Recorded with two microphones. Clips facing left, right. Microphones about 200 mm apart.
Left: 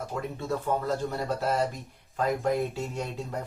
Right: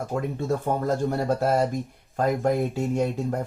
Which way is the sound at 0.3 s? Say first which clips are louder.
Right 2 dB; 50° right (ahead or behind).